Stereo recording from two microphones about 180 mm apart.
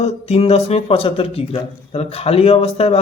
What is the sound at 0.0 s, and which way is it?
Speech, 35° left (ahead or behind).